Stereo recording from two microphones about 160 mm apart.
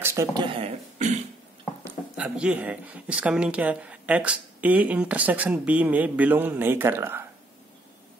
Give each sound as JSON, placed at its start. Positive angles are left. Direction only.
{"t": 0.0, "sound": "speech", "side_deg": -15}
{"t": 2.1, "sound": "speech", "side_deg": -5}